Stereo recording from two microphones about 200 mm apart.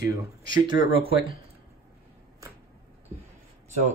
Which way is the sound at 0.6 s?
25° right (ahead or behind).